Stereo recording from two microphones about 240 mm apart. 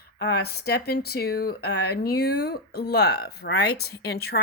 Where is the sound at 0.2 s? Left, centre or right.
Left.